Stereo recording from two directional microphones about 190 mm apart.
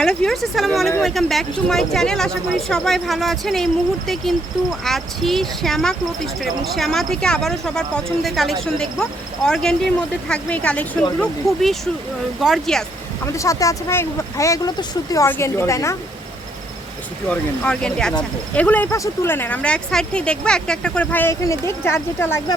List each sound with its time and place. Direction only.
0.0 s speech: 5° left (ahead or behind)
13.2 s speech: 15° left (ahead or behind)
17.2 s speech: 5° left (ahead or behind)